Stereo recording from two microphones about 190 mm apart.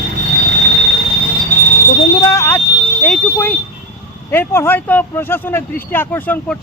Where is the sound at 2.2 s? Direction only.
15° left (ahead or behind).